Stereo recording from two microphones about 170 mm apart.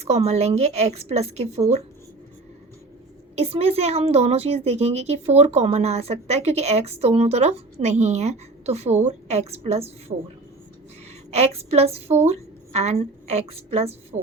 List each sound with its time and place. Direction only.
0.0 s a woman's voice: 40° right (ahead or behind)
3.3 s a woman's voice: 35° right (ahead or behind)
11.3 s a woman's voice: 40° right (ahead or behind)